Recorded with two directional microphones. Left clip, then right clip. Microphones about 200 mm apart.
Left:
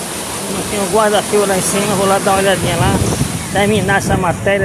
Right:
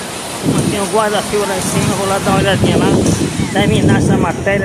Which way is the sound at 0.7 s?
15° left (ahead or behind).